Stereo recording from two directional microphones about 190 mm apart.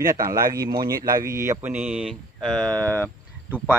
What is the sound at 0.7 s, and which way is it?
Speech, 50° right (ahead or behind).